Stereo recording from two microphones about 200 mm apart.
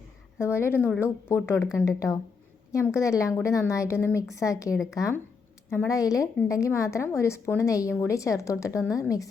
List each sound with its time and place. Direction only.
0.3 s a woman's voice: 10° left (ahead or behind)